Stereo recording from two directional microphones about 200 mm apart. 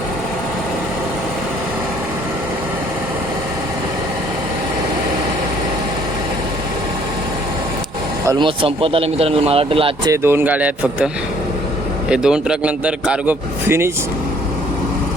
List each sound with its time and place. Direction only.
8.3 s speech: 25° right (ahead or behind)
10.1 s a man's voice: 10° right (ahead or behind)